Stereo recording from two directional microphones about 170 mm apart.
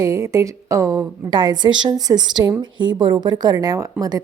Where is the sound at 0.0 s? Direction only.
15° right (ahead or behind).